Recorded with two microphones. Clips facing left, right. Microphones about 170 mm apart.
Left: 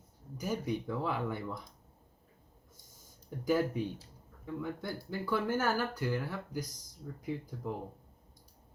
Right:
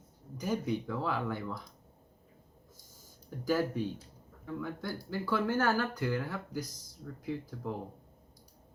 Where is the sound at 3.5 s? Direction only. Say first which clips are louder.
Even; 15° left (ahead or behind).